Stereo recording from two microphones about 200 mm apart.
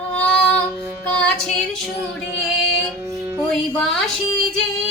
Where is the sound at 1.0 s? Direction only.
5° left (ahead or behind).